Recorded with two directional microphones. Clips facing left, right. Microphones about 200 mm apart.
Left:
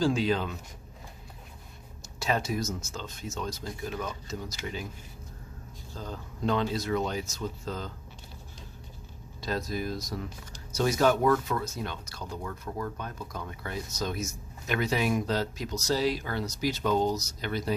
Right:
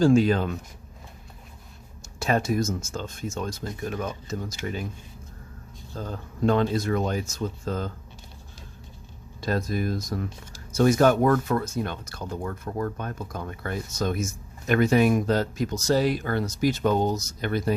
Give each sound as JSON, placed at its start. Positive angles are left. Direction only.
{"t": 0.0, "sound": "speech", "side_deg": -50}
{"t": 2.1, "sound": "speech", "side_deg": -50}
{"t": 6.0, "sound": "speech", "side_deg": -50}
{"t": 9.4, "sound": "speech", "side_deg": -50}